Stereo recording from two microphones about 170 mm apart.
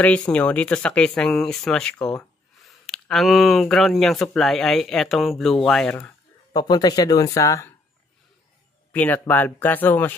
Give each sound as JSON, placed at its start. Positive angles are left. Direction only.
{"t": 0.3, "sound": "speech", "side_deg": 5}
{"t": 6.5, "sound": "speech", "side_deg": 25}
{"t": 8.9, "sound": "speech", "side_deg": 10}